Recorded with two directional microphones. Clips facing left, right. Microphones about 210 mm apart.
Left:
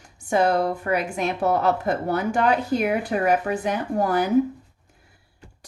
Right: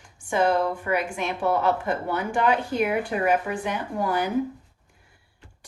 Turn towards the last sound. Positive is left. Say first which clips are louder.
# left 4 dB
turn(degrees=40)  # may be behind; listen again after turning